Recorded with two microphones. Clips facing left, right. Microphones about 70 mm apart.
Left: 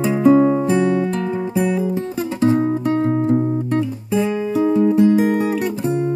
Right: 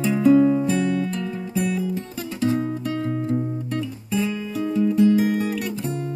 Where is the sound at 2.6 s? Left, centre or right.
Left.